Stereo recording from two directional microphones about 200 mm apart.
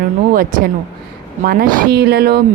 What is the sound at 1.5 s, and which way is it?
Speech, 45° right (ahead or behind).